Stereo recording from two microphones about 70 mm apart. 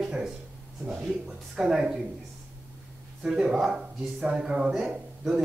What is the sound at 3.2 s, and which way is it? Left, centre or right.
Speech, centre.